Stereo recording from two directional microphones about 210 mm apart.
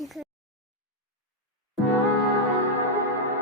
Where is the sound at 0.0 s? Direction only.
Centre (ahead or behind).